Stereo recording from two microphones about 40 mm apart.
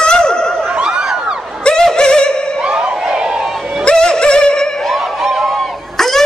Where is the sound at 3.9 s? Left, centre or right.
Left.